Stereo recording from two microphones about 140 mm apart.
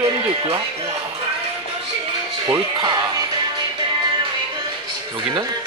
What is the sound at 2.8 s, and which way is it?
Speech, 30° right (ahead or behind).